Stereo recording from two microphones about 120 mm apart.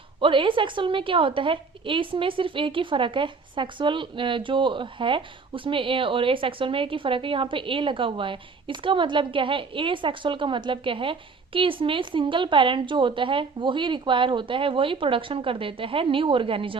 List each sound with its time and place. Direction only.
0.2 s a woman's voice: 45° right (ahead or behind)